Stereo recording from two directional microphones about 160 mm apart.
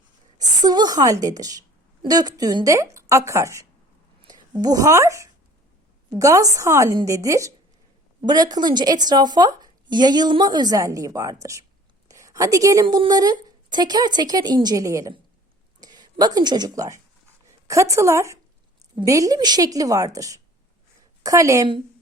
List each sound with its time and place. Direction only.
0.3 s a woman's voice: 25° right (ahead or behind)
15.8 s a sound: 25° right (ahead or behind)
18.9 s a woman's voice: 20° right (ahead or behind)